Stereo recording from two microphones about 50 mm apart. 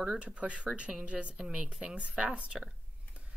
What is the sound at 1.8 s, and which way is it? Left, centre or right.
Speech, right.